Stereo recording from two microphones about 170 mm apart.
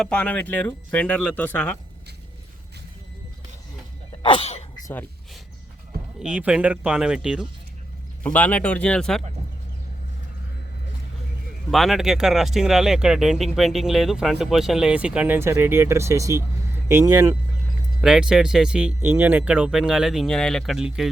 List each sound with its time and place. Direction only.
0.0 s speech: 5° left (ahead or behind)
4.2 s sneeze: 35° left (ahead or behind)
4.8 s a sound: 15° left (ahead or behind)
6.1 s speech: 10° right (ahead or behind)
8.2 s speech: 10° left (ahead or behind)
11.7 s speech: centre (ahead or behind); by 17.3 s 20° right (ahead or behind)
18.0 s speech: 5° right (ahead or behind)